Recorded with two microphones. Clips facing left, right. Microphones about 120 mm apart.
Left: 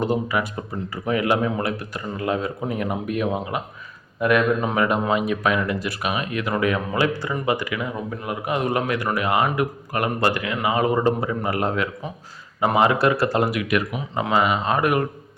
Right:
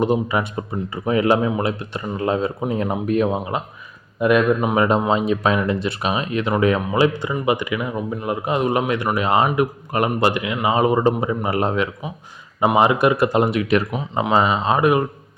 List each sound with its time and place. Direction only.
0.0 s speech: 20° right (ahead or behind)